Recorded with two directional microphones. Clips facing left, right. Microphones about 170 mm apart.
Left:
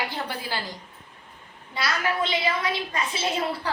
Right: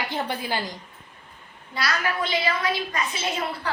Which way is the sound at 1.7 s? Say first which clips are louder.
Even; 25° left (ahead or behind).